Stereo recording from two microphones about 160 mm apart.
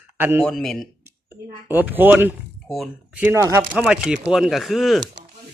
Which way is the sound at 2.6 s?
Centre (ahead or behind).